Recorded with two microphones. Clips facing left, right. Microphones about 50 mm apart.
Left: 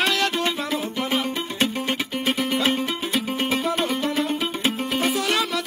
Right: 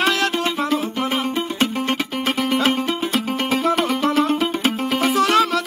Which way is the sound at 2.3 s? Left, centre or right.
Right.